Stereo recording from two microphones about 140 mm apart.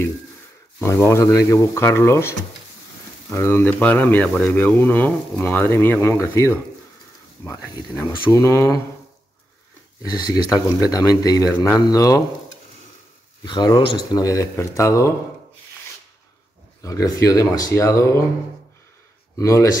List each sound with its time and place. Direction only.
0.7 s speech: 20° left (ahead or behind)
8.3 s speech: 20° left (ahead or behind)
10.1 s speech: 25° left (ahead or behind)
11.5 s speech: 15° left (ahead or behind)
11.9 s speech: 25° left (ahead or behind)
13.4 s speech: 30° left (ahead or behind)
14.2 s speech: 25° left (ahead or behind)
16.8 s speech: 25° left (ahead or behind)
19.3 s speech: 20° left (ahead or behind)